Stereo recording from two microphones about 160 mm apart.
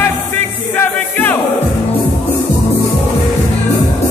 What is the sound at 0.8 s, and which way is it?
Music, 10° left (ahead or behind).